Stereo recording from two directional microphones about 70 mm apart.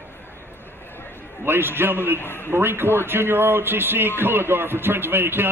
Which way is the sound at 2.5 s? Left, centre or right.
Right.